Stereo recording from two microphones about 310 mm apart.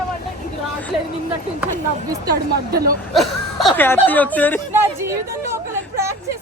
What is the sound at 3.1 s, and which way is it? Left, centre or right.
Speech, centre.